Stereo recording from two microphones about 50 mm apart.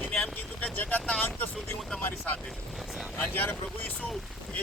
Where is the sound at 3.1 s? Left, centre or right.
Left.